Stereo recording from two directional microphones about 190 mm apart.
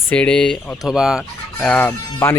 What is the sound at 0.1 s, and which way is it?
Speech, 5° left (ahead or behind).